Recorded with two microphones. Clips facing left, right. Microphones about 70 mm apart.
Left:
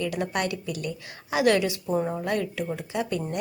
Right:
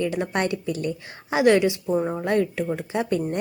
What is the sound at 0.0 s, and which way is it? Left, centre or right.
Speech, right.